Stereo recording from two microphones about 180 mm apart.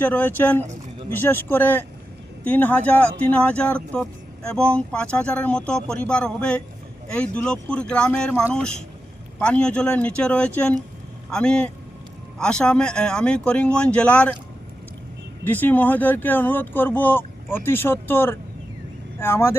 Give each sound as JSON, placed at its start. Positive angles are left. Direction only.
{"t": 0.0, "sound": "speech", "side_deg": 10}
{"t": 15.4, "sound": "speech", "side_deg": 10}